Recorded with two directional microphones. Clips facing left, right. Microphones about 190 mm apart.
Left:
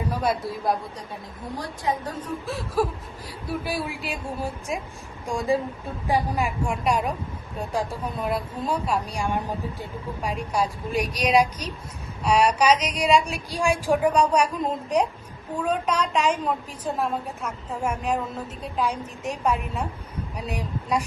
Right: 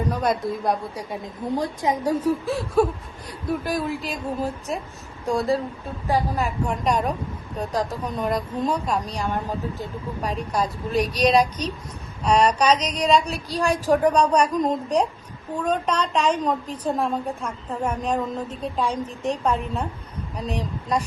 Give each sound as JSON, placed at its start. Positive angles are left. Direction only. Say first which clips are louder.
{"t": 0.1, "sound": "a woman's voice", "louder": "even", "side_deg": 5}
{"t": 1.2, "sound": "a woman's voice", "louder": "right 9 dB", "side_deg": -20}
{"t": 18.6, "sound": "a woman's voice", "louder": "right 1 dB", "side_deg": -35}
{"t": 19.5, "sound": "a woman's voice", "louder": "right 1 dB", "side_deg": 10}